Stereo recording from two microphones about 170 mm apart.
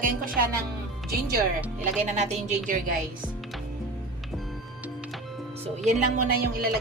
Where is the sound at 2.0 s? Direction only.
45° right (ahead or behind).